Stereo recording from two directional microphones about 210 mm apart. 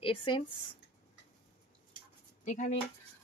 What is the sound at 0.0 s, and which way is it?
Speech, 25° left (ahead or behind).